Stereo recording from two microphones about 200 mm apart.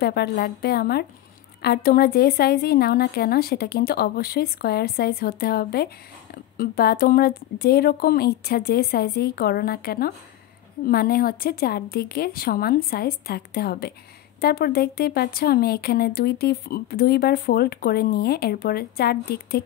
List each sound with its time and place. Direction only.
0.0 s speech: 50° left (ahead or behind)